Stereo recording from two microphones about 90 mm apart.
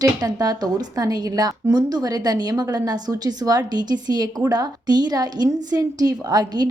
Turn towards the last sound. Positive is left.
turn(degrees=-45)  # may be behind; listen again after turning